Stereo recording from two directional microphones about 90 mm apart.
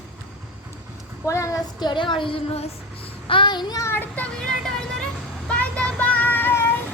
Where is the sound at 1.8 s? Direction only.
60° left (ahead or behind).